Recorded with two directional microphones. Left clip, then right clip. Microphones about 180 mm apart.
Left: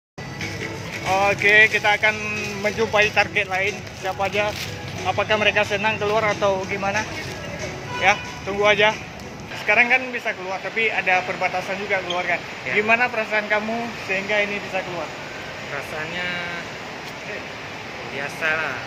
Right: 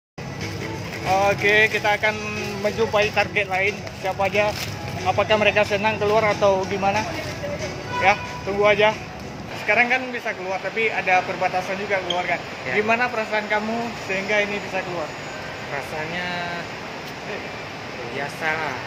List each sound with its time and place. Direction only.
1.0 s speech: 10° left (ahead or behind)
3.2 s speech: 5° right (ahead or behind)
8.1 s speech: centre (ahead or behind)
18.4 s speech: 20° right (ahead or behind)